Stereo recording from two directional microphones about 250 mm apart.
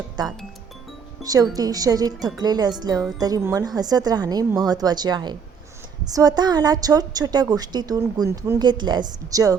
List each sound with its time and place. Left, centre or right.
0.2 s a woman's voice: centre